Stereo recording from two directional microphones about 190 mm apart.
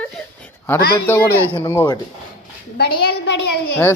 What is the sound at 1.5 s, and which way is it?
Speech, 20° left (ahead or behind).